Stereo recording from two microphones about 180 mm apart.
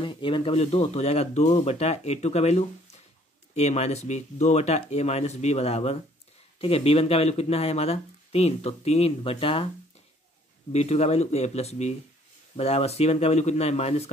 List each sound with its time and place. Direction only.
0.0 s speech: 25° left (ahead or behind)
10.7 s speech: 35° left (ahead or behind)